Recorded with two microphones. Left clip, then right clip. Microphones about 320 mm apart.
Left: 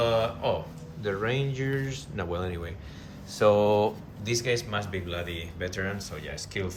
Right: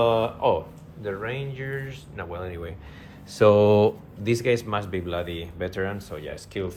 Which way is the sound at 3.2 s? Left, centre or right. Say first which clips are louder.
Right 5 dB; right.